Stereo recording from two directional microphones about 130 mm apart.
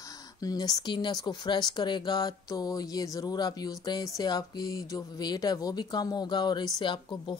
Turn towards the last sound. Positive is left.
turn(degrees=35)  # may be behind; listen again after turning